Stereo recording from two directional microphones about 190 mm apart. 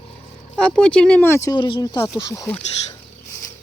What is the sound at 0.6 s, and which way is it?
Speech, 5° left (ahead or behind).